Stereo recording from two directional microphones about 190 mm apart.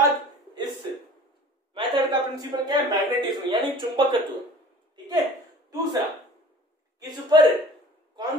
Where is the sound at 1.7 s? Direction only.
25° right (ahead or behind).